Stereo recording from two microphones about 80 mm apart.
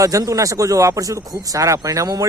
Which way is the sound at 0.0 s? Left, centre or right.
Right.